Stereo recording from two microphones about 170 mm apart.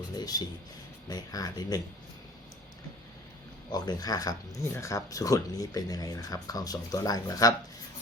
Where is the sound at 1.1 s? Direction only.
20° left (ahead or behind).